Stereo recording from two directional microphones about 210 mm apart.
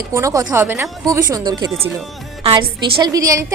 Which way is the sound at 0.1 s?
15° right (ahead or behind).